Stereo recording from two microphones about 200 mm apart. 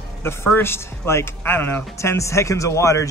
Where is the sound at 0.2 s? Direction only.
10° left (ahead or behind).